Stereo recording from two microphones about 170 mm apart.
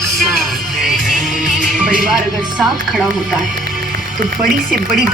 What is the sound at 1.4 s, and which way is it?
Music, 50° right (ahead or behind).